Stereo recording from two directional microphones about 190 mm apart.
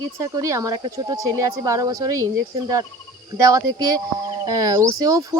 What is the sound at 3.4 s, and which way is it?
Speech, 20° right (ahead or behind).